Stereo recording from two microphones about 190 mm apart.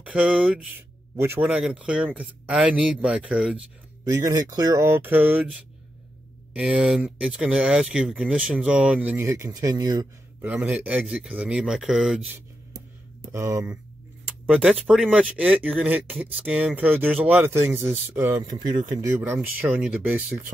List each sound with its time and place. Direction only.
0.0 s speech: 5° right (ahead or behind)
4.1 s speech: 15° right (ahead or behind)
13.2 s speech: 15° right (ahead or behind)